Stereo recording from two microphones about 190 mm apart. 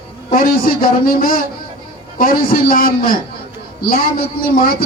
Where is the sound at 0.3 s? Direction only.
50° left (ahead or behind).